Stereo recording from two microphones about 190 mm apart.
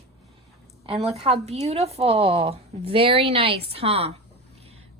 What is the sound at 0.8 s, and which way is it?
A woman's voice, 35° right (ahead or behind).